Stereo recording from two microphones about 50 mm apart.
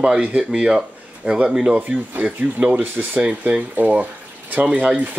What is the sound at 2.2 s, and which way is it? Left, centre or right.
Speech, right.